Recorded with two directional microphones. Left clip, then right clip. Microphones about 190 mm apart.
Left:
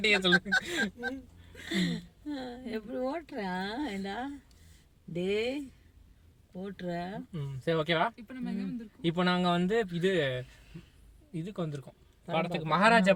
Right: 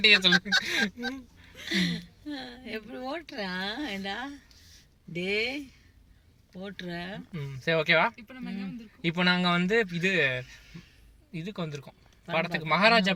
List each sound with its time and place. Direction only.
0.0 s speech: 5° right (ahead or behind)
1.6 s speech: 20° left (ahead or behind)
7.3 s speech: 10° right (ahead or behind)
9.0 s speech: 10° right (ahead or behind)
12.6 s speech: 60° right (ahead or behind)